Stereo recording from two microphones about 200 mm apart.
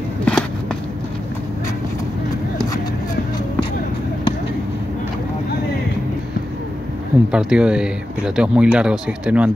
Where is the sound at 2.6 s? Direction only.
20° left (ahead or behind).